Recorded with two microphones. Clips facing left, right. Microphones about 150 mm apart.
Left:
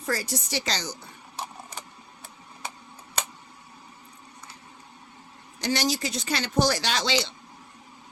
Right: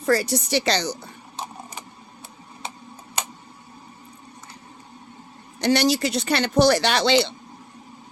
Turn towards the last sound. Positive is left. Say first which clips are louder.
# right 7 dB
turn(degrees=-65)  # may be behind; listen again after turning